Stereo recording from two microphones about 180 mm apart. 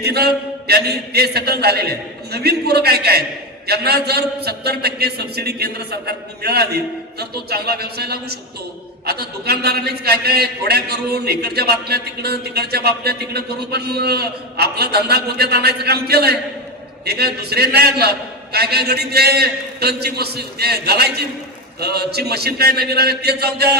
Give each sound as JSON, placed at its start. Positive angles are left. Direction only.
{"t": 0.1, "sound": "a man's voice", "side_deg": -60}